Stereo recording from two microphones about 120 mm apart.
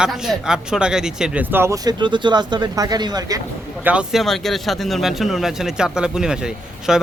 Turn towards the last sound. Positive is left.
turn(degrees=-5)  # may be behind; listen again after turning